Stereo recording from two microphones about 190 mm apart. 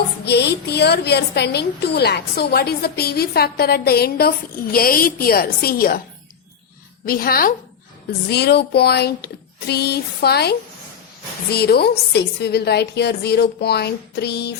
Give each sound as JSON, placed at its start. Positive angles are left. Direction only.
{"t": 0.3, "sound": "a woman's voice", "side_deg": 60}
{"t": 7.0, "sound": "a woman's voice", "side_deg": 50}
{"t": 11.5, "sound": "a woman's voice", "side_deg": 55}